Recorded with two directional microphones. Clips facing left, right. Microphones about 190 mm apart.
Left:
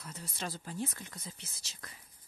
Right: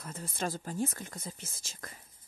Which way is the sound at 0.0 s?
50° right (ahead or behind).